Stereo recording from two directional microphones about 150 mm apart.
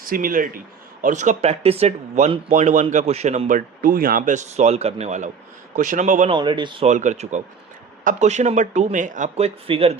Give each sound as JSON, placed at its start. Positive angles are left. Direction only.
{"t": 0.0, "sound": "speech", "side_deg": -70}
{"t": 1.0, "sound": "speech", "side_deg": -55}
{"t": 6.3, "sound": "speech", "side_deg": -30}
{"t": 6.8, "sound": "speech", "side_deg": -50}